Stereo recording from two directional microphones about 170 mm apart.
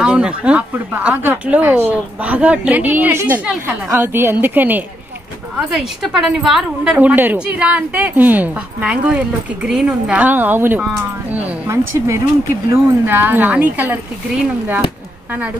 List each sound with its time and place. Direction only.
0.0 s speech: 5° right (ahead or behind)